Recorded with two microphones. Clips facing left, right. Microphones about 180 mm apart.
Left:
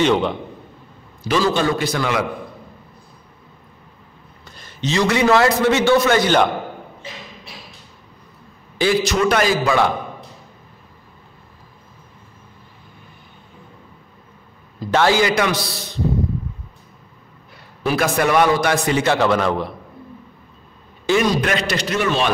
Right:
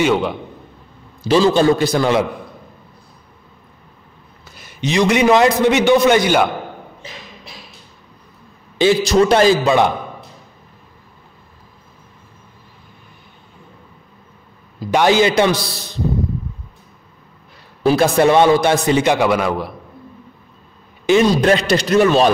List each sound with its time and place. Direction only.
0.0 s a man's voice: 5° right (ahead or behind)
1.2 s a man's voice: 30° right (ahead or behind)
4.5 s a man's voice: 10° right (ahead or behind)
8.7 s a man's voice: 30° right (ahead or behind)
14.8 s a man's voice: 15° right (ahead or behind); by 15.8 s 30° right (ahead or behind)
17.8 s a man's voice: 30° right (ahead or behind); by 19.7 s 10° right (ahead or behind)
21.0 s a sound: 20° right (ahead or behind)
21.3 s a man's voice: 30° right (ahead or behind)